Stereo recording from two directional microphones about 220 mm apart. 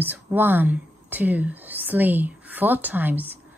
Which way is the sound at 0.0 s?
10° right (ahead or behind).